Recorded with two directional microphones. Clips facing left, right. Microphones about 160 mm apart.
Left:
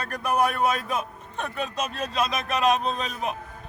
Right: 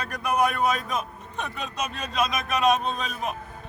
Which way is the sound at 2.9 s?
Centre (ahead or behind).